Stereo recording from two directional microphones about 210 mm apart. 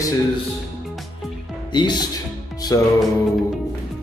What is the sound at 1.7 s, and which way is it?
Speech, 20° left (ahead or behind).